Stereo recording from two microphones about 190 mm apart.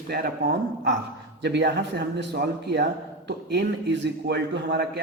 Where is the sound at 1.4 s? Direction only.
60° right (ahead or behind).